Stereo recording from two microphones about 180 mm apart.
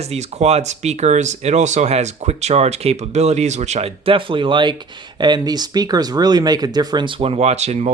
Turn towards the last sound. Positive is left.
turn(degrees=-40)  # may be behind; listen again after turning